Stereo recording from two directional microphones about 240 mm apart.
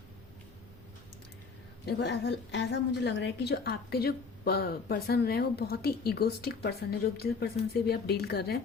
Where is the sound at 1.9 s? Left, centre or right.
Left.